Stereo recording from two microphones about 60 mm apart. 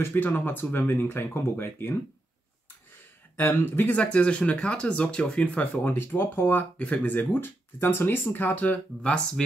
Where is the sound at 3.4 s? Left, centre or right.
Left.